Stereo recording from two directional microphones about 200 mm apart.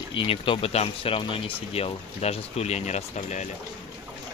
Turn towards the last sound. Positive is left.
turn(degrees=35)  # may be behind; listen again after turning